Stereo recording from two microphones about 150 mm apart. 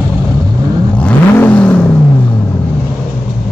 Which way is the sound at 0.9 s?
10° left (ahead or behind).